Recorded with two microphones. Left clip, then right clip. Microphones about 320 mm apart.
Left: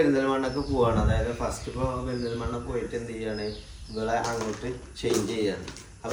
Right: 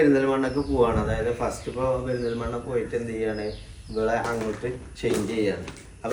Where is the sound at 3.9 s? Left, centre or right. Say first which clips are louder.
Right 3 dB; centre.